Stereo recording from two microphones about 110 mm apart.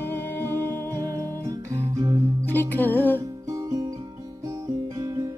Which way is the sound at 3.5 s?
30° right (ahead or behind).